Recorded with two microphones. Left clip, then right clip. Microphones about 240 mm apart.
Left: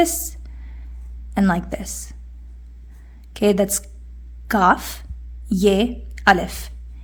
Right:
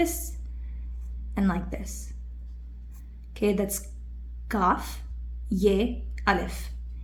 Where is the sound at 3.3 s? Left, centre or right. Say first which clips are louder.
Left 9 dB; left.